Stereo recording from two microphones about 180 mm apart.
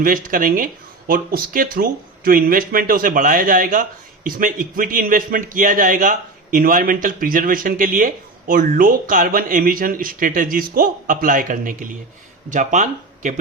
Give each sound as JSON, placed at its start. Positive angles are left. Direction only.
{"t": 0.0, "sound": "speech", "side_deg": -50}